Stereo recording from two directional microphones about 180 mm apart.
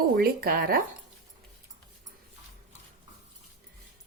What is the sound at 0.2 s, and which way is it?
Speech, 55° right (ahead or behind).